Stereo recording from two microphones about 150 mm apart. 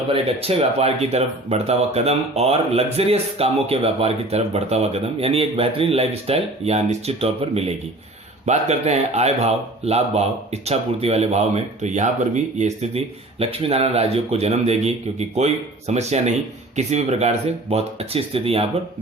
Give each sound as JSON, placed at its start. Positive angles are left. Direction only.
{"t": 0.1, "sound": "speech", "side_deg": -40}